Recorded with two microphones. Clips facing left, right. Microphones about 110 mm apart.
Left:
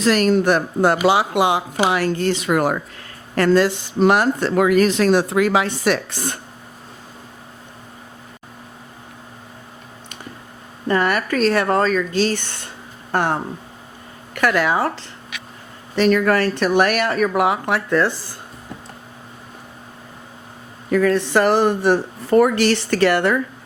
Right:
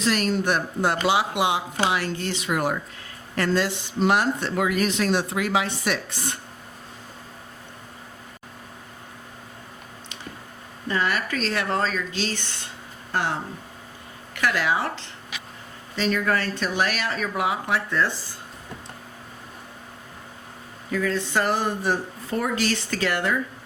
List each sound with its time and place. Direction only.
0.0 s speech: 70° left (ahead or behind)
1.0 s speech: 50° left (ahead or behind)
1.9 s speech: 60° left (ahead or behind)
3.5 s speech: 55° left (ahead or behind)
5.8 s speech: 80° left
10.8 s speech: 55° left (ahead or behind)
16.0 s speech: 60° left (ahead or behind)
20.9 s speech: 65° left (ahead or behind)